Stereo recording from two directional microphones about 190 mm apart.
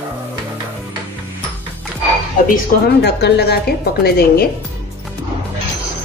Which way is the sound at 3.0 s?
60° left (ahead or behind).